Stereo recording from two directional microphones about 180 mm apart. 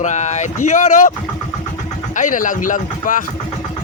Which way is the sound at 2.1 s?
45° left (ahead or behind).